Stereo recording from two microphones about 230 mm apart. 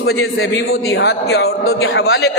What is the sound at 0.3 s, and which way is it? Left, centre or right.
Speech, left.